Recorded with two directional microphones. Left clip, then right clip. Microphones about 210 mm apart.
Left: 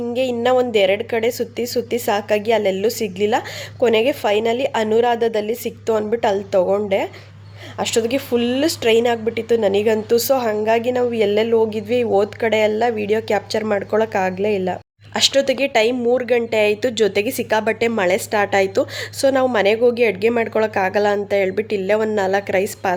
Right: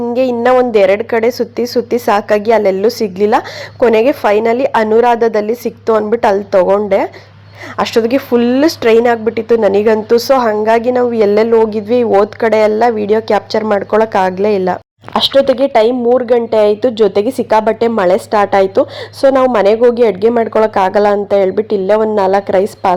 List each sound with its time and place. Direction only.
0.0 s a woman's voice: 20° right (ahead or behind)
15.3 s speech: 5° left (ahead or behind)
15.5 s a woman's voice: 20° right (ahead or behind)